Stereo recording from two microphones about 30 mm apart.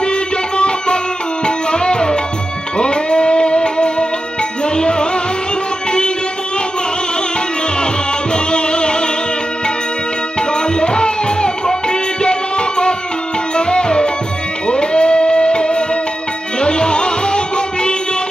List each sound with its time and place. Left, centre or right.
0.0 s music: left
8.3 s music: left
10.5 s music: left